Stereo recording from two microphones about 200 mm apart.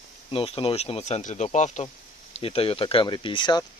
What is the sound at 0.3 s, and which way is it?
Speech, 25° left (ahead or behind).